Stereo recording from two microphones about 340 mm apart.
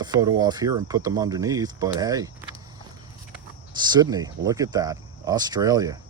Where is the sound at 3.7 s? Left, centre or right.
Centre.